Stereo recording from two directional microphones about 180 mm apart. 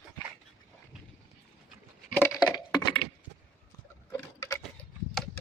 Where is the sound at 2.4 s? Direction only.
20° left (ahead or behind).